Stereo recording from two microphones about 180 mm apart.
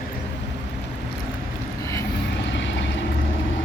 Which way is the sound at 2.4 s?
90° left.